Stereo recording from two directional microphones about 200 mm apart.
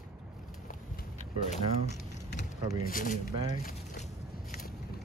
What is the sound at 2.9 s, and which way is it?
Speech, 45° left (ahead or behind).